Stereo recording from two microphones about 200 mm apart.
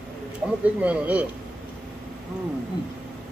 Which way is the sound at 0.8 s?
5° right (ahead or behind).